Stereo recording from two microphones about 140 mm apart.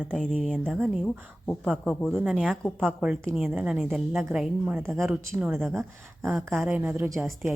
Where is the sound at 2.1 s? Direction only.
10° right (ahead or behind).